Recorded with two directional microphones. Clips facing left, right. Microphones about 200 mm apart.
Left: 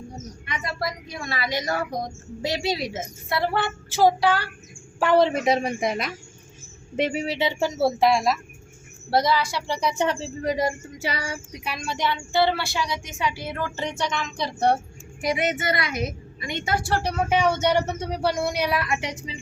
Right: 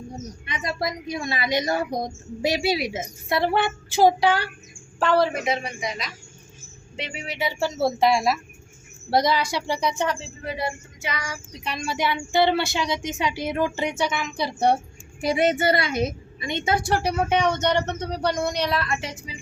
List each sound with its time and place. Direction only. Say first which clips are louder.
0.4 s a woman's voice: right 2 dB; 20° right (ahead or behind)
4.9 s a woman's voice: left 2 dB; 15° left (ahead or behind)
5.5 s speech: left 5 dB; 40° left (ahead or behind)
7.3 s a woman's voice: right 2 dB; 25° left (ahead or behind)
7.8 s speech: even; 5° left (ahead or behind)
9.0 s a woman's voice: even; 15° right (ahead or behind)
10.2 s speech: left 6 dB; 40° left (ahead or behind)
11.5 s speech: right 1 dB; 5° left (ahead or behind)
11.9 s a woman's voice: right 1 dB; 10° right (ahead or behind)
15.2 s a woman's voice: right 4 dB; 30° right (ahead or behind); by 17.2 s 10° right (ahead or behind)
17.2 s speech: left 3 dB; 5° left (ahead or behind); by 19.4 s 20° left (ahead or behind)